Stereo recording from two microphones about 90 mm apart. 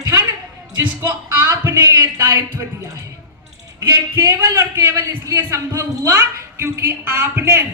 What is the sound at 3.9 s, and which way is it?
A woman's voice, 25° right (ahead or behind).